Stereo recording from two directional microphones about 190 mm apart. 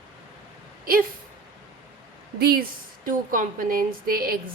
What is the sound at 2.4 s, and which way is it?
A woman's voice, 55° right (ahead or behind).